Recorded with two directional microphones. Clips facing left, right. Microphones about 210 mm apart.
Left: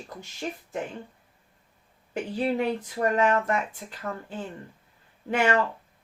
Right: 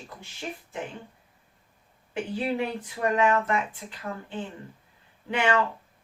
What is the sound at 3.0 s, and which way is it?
Speech, 40° left (ahead or behind).